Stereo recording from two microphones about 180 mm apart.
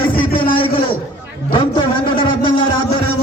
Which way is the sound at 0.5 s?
30° left (ahead or behind).